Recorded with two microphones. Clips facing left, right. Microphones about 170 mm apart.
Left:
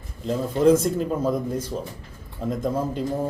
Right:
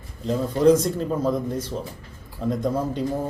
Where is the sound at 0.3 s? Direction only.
5° left (ahead or behind).